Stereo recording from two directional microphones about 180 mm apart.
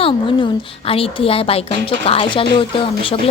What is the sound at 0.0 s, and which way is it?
Speech, 30° left (ahead or behind).